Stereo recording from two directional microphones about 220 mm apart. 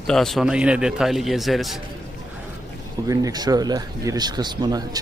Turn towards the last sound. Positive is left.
turn(degrees=-15)  # may be behind; listen again after turning